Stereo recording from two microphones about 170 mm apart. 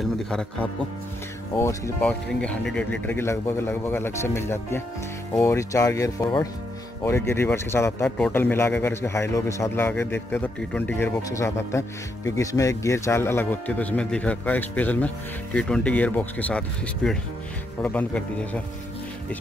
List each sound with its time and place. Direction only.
0.0 s speech: 5° left (ahead or behind)
2.0 s a man's voice: 5° left (ahead or behind)